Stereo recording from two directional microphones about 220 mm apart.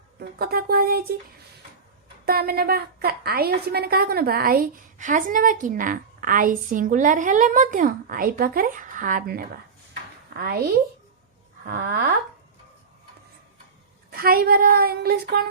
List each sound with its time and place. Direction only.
0.2 s speech: 45° right (ahead or behind)
2.2 s a woman's voice: 45° right (ahead or behind)
14.1 s speech: 45° right (ahead or behind)